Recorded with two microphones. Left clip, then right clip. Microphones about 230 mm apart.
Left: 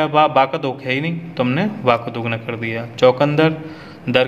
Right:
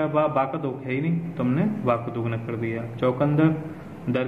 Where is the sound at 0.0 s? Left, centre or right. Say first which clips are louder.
Left 8 dB; left.